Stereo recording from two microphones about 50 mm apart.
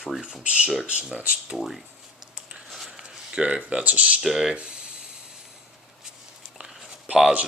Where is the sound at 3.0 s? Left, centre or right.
Centre.